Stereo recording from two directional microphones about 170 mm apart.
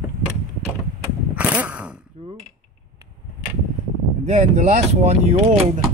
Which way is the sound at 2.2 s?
30° right (ahead or behind).